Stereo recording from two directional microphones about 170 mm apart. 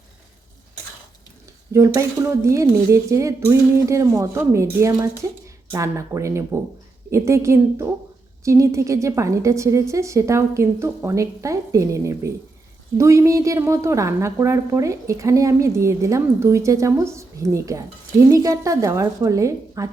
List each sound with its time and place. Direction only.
1.7 s a woman's voice: 15° right (ahead or behind)